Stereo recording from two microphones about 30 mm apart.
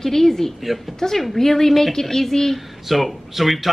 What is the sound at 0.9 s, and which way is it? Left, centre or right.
A woman's voice, centre.